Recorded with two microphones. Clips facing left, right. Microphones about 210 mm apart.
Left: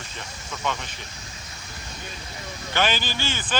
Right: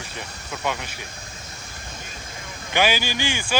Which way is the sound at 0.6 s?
10° right (ahead or behind).